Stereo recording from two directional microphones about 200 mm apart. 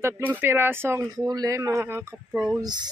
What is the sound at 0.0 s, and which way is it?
A man's voice, 10° right (ahead or behind).